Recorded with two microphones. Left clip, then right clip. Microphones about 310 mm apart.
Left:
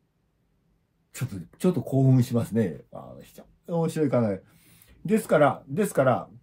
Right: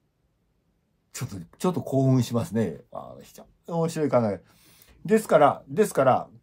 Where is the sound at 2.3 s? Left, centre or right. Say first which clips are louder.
Even; right.